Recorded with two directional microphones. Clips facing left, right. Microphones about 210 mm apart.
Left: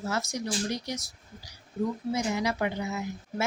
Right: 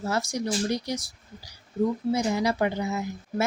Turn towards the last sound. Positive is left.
turn(degrees=-35)  # may be behind; listen again after turning